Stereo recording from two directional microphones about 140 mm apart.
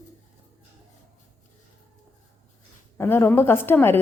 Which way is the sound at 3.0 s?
15° left (ahead or behind).